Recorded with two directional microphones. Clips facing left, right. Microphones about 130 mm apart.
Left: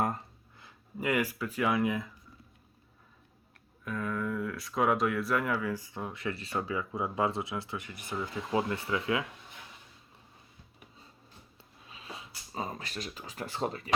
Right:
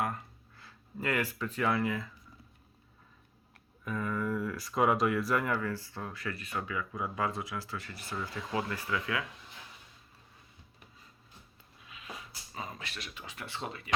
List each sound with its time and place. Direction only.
0.5 s speech: 15° left (ahead or behind)
3.8 s speech: centre (ahead or behind); by 9.2 s 25° left (ahead or behind)
11.9 s speech: 30° left (ahead or behind)